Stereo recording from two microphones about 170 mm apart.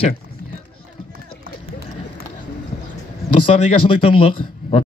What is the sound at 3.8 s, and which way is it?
Speech, 35° left (ahead or behind).